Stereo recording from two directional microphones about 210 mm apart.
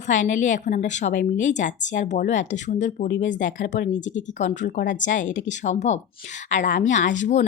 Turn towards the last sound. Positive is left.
turn(degrees=35)  # may be behind; listen again after turning